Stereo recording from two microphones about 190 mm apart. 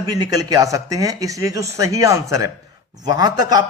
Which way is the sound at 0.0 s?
20° right (ahead or behind).